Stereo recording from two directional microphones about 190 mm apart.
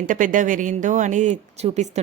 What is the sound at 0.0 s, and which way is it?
Speech, 45° right (ahead or behind).